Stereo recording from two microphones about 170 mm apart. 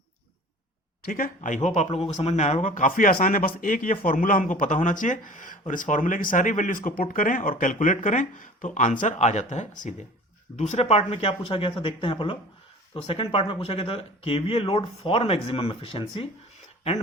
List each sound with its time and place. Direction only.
1.0 s speech: 55° left (ahead or behind); by 16.3 s 30° left (ahead or behind)